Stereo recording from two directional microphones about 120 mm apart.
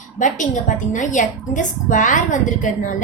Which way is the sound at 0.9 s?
90° left.